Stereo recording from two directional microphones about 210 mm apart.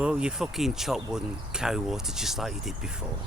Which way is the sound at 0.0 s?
5° right (ahead or behind).